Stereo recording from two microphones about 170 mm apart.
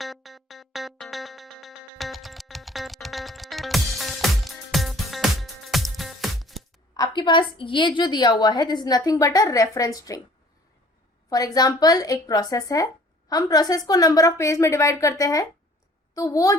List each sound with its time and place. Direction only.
0.0 s music: centre (ahead or behind)
6.9 s a woman's voice: 25° left (ahead or behind)
11.3 s a woman's voice: 20° left (ahead or behind)